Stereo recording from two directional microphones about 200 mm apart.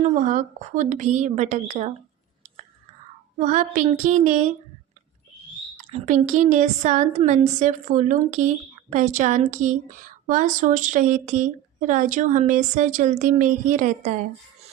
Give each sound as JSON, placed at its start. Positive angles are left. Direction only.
{"t": 0.0, "sound": "a woman's voice", "side_deg": -40}
{"t": 3.3, "sound": "a woman's voice", "side_deg": -40}
{"t": 5.7, "sound": "a woman's voice", "side_deg": -40}